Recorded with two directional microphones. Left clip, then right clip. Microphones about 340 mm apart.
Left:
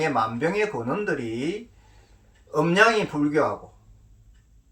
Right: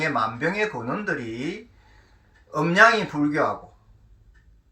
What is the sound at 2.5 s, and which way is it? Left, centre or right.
Speech, centre.